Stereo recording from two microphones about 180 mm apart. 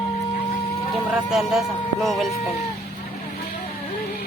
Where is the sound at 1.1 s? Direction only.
5° right (ahead or behind).